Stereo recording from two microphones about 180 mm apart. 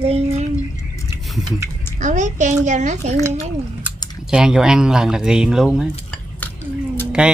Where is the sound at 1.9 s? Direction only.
40° right (ahead or behind).